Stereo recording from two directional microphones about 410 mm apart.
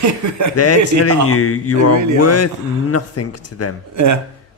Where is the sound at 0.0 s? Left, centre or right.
Right.